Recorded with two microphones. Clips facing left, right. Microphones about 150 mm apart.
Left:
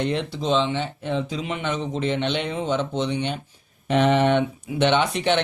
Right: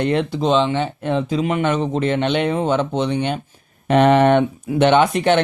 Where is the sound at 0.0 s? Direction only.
60° right (ahead or behind).